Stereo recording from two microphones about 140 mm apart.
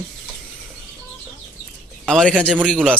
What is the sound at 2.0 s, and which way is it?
Speech, 5° left (ahead or behind).